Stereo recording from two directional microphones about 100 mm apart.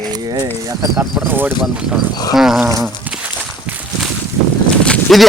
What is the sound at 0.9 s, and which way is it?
Speech, 20° right (ahead or behind).